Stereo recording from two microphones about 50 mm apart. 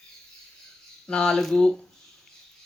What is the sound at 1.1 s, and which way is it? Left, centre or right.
Speech, centre.